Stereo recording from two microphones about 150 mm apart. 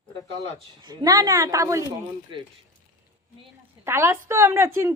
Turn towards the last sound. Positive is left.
turn(degrees=-20)  # may be behind; listen again after turning